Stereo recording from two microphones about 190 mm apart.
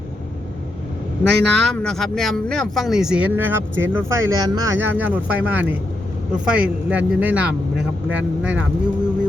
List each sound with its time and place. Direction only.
1.3 s speech: 5° left (ahead or behind)